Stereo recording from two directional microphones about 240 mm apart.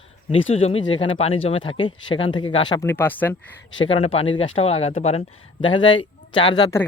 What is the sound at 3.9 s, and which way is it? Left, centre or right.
Speech, left.